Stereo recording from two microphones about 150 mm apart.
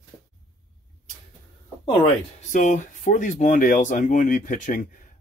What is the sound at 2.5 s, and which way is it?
Speech, 60° left (ahead or behind).